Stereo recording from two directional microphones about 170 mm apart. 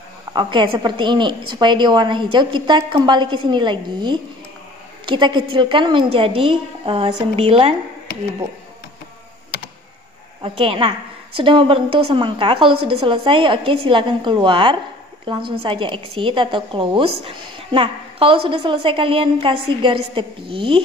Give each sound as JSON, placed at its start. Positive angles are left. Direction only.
{"t": 0.3, "sound": "a woman's voice", "side_deg": -25}
{"t": 10.4, "sound": "a woman's voice", "side_deg": -35}